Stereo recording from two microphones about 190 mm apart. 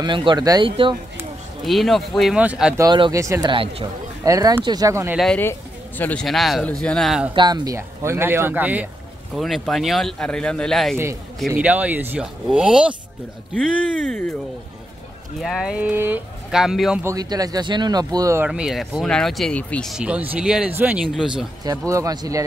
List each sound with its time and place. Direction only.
0.0 s speech: 25° right (ahead or behind)
1.6 s speech: centre (ahead or behind)
2.8 s speech: 20° right (ahead or behind)
3.5 s speech: 30° right (ahead or behind)
4.3 s speech: 20° right (ahead or behind)
5.1 s speech: centre (ahead or behind)
7.3 s speech: 20° right (ahead or behind); by 12.9 s 5° right (ahead or behind)
15.4 s speech: centre (ahead or behind)
17.0 s speech: 20° right (ahead or behind)
18.5 s speech: 5° right (ahead or behind)
21.6 s speech: 15° right (ahead or behind)